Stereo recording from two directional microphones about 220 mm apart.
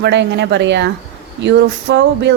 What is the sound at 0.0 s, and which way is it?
A woman's voice, 50° right (ahead or behind).